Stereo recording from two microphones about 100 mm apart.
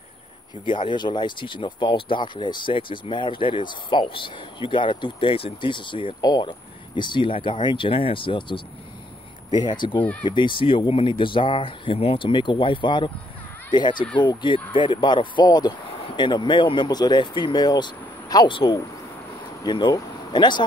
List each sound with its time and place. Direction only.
0.7 s speech: 55° left (ahead or behind)